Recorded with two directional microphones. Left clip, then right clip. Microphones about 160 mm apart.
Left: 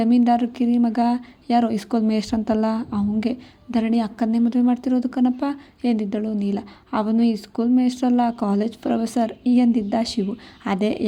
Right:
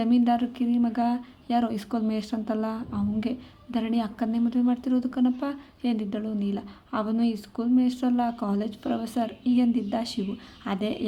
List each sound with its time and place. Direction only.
0.0 s a woman's voice: 30° left (ahead or behind)